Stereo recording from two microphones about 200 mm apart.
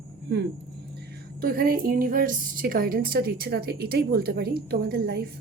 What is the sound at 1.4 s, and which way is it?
A woman's voice, 50° right (ahead or behind).